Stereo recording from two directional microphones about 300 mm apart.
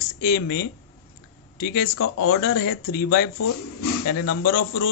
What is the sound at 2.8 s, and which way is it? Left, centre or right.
Speech, left.